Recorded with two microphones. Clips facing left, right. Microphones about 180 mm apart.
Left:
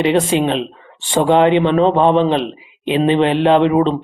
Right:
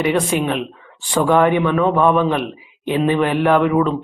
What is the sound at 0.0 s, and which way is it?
Speech, 25° left (ahead or behind).